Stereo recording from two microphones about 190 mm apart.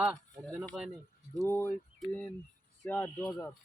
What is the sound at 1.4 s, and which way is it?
Speech, 15° left (ahead or behind).